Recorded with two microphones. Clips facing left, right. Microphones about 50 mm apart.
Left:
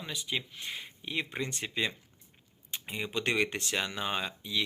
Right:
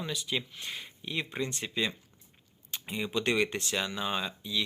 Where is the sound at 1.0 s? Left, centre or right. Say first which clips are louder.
Right 1 dB; left.